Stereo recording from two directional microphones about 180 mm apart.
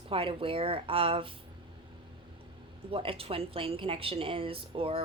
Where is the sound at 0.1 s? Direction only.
30° right (ahead or behind).